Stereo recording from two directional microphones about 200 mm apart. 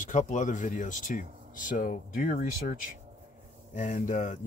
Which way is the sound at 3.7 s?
40° left (ahead or behind).